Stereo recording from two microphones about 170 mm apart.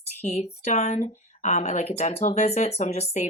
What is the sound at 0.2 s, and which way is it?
A woman's voice, 40° left (ahead or behind).